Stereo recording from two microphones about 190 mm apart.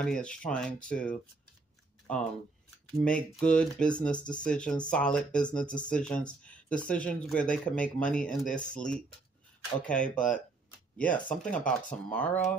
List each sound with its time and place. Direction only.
0.0 s speech: 5° left (ahead or behind)